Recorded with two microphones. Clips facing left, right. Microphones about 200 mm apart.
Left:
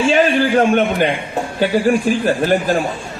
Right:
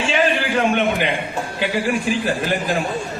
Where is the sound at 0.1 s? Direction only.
40° left (ahead or behind).